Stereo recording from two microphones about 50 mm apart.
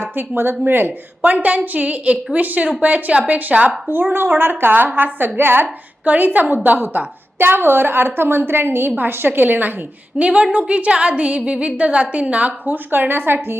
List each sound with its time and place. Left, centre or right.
0.0 s a woman's voice: right
4.1 s a woman's voice: right
6.1 s a woman's voice: right
10.2 s a woman's voice: right
12.6 s a woman's voice: right